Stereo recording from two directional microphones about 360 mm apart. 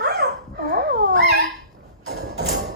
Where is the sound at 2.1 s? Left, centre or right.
Right.